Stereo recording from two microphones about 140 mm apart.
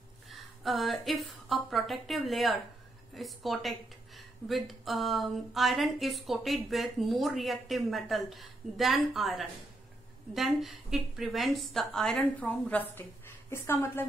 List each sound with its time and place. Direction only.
0.3 s a woman's voice: centre (ahead or behind); by 14.0 s 15° left (ahead or behind)